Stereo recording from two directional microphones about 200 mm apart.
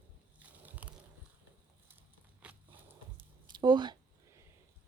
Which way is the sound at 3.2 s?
20° right (ahead or behind).